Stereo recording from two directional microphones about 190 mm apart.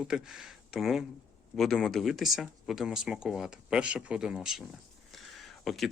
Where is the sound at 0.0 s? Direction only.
Centre (ahead or behind).